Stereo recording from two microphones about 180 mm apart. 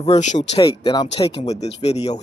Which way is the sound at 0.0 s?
40° left (ahead or behind).